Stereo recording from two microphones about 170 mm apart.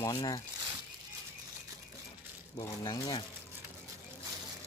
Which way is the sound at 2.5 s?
25° left (ahead or behind).